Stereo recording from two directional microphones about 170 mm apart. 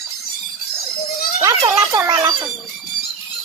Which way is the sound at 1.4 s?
20° right (ahead or behind).